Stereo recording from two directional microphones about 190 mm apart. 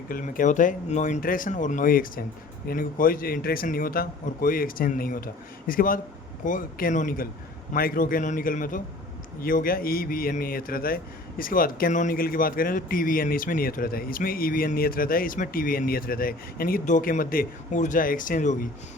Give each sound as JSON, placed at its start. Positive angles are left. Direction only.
{"t": 0.1, "sound": "a man's voice", "side_deg": 45}